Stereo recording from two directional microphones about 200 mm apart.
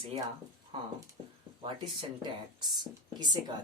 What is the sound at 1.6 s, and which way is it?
Speech, 20° right (ahead or behind).